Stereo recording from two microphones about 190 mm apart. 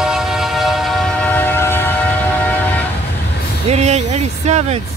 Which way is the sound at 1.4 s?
10° left (ahead or behind).